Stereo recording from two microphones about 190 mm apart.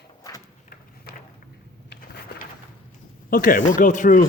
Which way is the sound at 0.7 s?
50° left (ahead or behind).